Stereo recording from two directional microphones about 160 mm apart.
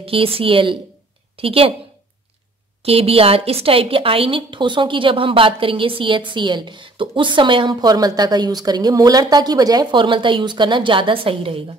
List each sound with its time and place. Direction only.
0.0 s a woman's voice: 35° right (ahead or behind)
2.8 s a woman's voice: 35° right (ahead or behind)